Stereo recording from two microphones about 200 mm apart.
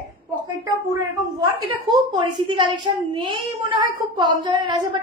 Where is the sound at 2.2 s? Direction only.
20° right (ahead or behind).